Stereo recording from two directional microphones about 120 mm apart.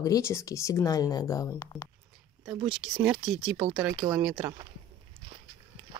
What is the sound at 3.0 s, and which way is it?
Speech, 5° right (ahead or behind).